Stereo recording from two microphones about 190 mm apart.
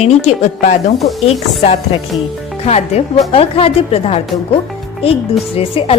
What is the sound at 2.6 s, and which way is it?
A woman's voice, 35° left (ahead or behind).